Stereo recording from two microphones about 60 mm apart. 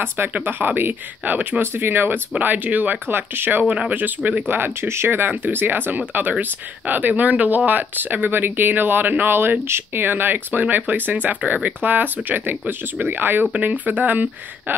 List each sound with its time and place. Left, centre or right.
0.3 s speech: right